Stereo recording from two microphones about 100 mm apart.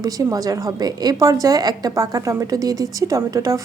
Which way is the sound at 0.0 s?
35° right (ahead or behind).